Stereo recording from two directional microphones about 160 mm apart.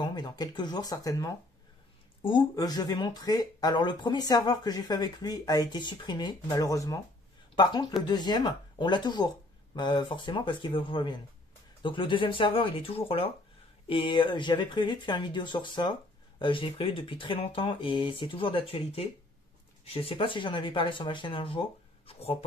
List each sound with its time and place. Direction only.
0.0 s speech: 25° left (ahead or behind)